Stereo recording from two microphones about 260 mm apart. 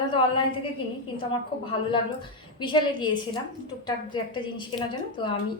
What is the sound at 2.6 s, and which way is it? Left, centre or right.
A woman's voice, centre.